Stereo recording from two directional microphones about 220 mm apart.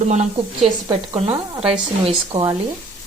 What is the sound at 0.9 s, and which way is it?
Speech, 25° right (ahead or behind).